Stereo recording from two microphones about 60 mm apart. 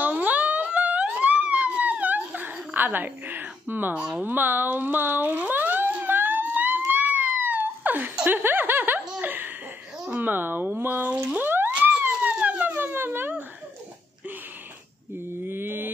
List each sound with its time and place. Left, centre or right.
0.0 s a sound: right
4.2 s speech: right
6.1 s a sound: right
8.3 s chuckle: right
9.2 s giggle: right
10.2 s speech: right
11.7 s police car: right
12.2 s dog: right
15.4 s mantra: right